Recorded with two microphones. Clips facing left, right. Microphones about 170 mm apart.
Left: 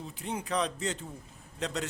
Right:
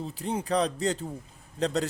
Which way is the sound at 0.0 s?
35° right (ahead or behind).